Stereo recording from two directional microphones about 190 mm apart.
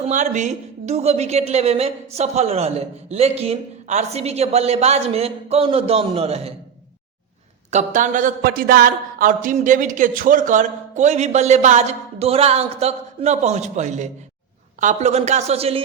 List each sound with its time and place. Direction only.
0.0 s a woman's voice: 40° right (ahead or behind)
7.7 s a woman's voice: 40° right (ahead or behind)